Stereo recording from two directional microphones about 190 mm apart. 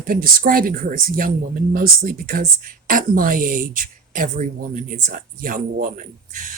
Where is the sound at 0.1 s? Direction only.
50° right (ahead or behind).